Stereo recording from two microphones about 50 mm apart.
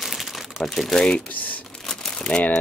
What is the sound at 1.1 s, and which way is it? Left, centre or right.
Speech, left.